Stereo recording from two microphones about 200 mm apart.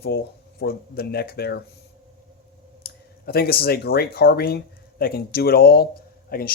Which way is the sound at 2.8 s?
50° left (ahead or behind).